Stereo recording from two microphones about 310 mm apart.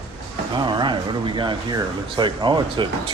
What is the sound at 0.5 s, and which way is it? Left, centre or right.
Speech, centre.